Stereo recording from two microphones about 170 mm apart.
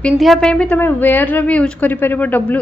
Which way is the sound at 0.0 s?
Centre (ahead or behind).